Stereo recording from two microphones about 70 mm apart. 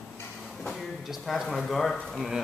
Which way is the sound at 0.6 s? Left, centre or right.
Centre.